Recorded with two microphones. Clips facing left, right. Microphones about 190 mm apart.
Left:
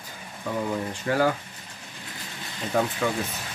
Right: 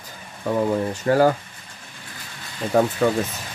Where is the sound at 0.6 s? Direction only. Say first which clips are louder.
Right 7 dB; 40° right (ahead or behind).